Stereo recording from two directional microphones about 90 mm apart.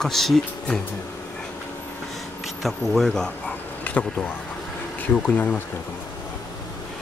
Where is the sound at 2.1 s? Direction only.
Centre (ahead or behind).